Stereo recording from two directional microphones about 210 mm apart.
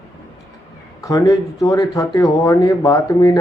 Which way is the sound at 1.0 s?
15° left (ahead or behind).